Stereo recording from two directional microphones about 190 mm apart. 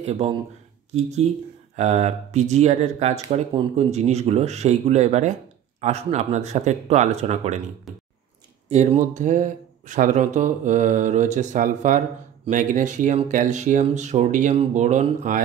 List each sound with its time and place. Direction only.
0.0 s speech: 30° right (ahead or behind)
8.6 s speech: 35° right (ahead or behind)